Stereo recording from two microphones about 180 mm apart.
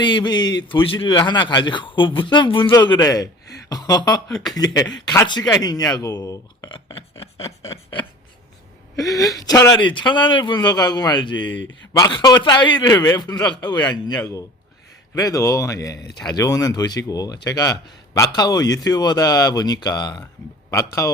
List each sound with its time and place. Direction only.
0.0 s a man's voice: 25° left (ahead or behind)
9.0 s a man's voice: 20° left (ahead or behind)